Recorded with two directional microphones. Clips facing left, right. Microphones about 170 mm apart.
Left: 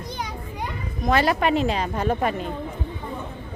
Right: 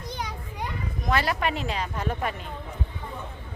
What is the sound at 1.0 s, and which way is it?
Speech, 25° left (ahead or behind).